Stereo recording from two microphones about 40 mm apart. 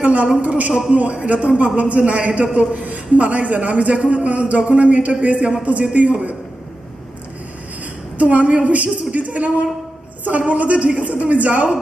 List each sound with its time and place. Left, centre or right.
0.0 s a man's voice: right
8.2 s a man's voice: right